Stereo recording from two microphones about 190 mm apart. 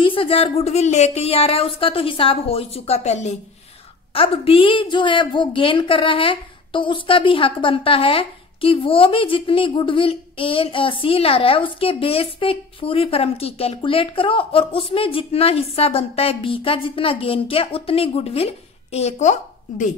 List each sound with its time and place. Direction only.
0.0 s a woman's voice: 30° left (ahead or behind)